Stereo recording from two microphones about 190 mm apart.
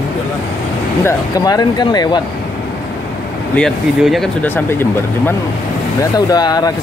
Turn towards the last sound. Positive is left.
turn(degrees=20)  # may be behind; listen again after turning